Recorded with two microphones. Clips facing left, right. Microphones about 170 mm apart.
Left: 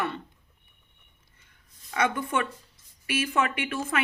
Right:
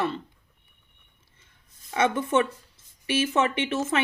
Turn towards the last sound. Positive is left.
turn(degrees=-25)  # may be behind; listen again after turning